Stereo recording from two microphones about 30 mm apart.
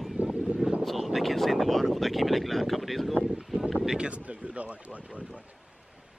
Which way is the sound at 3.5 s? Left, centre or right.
Centre.